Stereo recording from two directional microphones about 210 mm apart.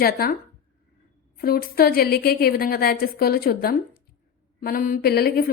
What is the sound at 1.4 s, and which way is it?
A woman's voice, 45° left (ahead or behind).